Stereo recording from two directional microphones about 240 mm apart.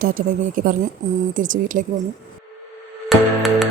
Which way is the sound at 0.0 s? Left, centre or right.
Right.